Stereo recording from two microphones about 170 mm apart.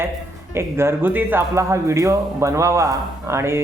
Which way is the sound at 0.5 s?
15° right (ahead or behind).